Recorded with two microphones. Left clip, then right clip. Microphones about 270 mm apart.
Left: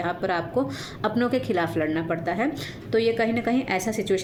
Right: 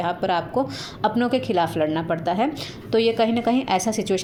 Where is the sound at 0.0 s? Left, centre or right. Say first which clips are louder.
Right 3 dB; centre.